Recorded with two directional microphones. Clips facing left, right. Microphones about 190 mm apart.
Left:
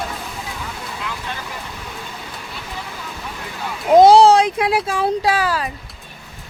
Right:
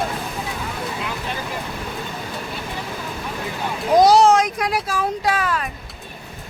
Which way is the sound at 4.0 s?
30° left (ahead or behind).